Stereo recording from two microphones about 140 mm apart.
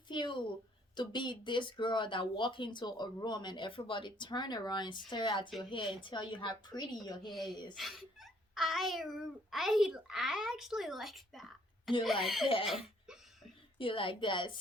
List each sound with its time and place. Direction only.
0.1 s a sound: 35° left (ahead or behind)
0.9 s speech: 35° left (ahead or behind)
7.3 s a child's voice: centre (ahead or behind)
13.7 s speech: 40° left (ahead or behind)